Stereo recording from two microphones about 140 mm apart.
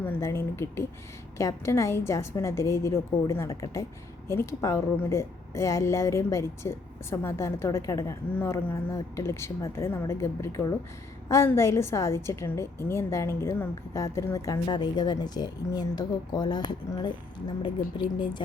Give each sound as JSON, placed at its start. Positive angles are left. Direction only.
{"t": 0.0, "sound": "a woman's voice", "side_deg": 15}